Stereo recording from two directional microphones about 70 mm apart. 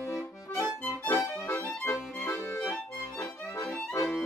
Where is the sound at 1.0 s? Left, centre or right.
Left.